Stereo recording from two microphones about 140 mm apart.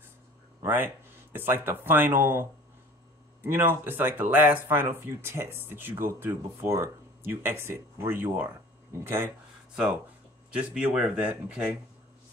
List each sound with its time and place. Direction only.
0.6 s speech: 15° right (ahead or behind)
3.4 s speech: 15° right (ahead or behind)
10.5 s speech: 5° right (ahead or behind)